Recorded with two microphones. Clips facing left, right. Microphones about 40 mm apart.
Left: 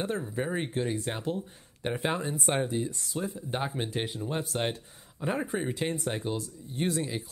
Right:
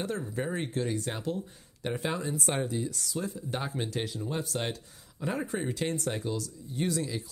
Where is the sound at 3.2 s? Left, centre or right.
Left.